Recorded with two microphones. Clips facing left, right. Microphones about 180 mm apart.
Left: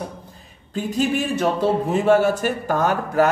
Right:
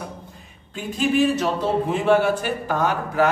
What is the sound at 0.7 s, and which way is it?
A man's voice, 40° left (ahead or behind).